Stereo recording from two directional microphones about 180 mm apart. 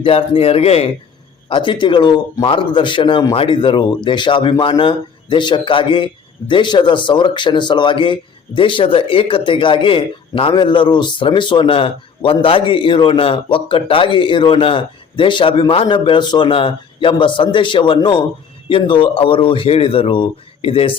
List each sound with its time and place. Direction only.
0.0 s speech: 30° left (ahead or behind)